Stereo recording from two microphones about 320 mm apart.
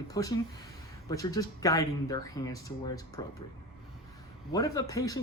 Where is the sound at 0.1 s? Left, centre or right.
Centre.